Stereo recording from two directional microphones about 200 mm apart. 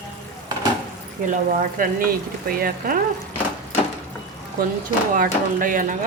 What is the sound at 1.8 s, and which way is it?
A woman's voice, 45° right (ahead or behind).